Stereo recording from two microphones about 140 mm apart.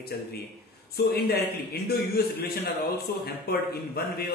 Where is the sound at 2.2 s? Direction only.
90° left.